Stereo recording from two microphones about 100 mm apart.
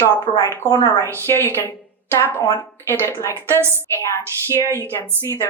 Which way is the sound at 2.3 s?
35° left (ahead or behind).